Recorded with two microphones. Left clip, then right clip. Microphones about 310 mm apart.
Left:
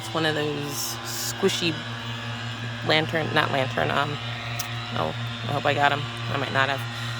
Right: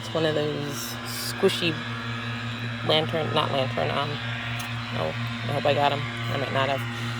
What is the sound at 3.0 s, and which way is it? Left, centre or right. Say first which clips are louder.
Speech: left 2 dB; left.